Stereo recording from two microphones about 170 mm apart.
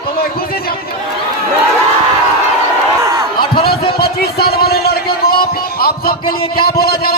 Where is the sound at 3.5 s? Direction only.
65° left (ahead or behind).